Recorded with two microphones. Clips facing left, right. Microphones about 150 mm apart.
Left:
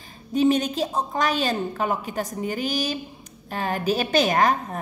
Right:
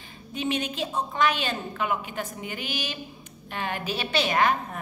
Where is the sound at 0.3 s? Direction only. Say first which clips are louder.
Left 9 dB; 40° left (ahead or behind).